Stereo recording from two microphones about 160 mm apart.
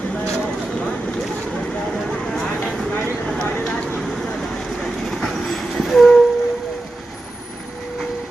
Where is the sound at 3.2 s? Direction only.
5° left (ahead or behind).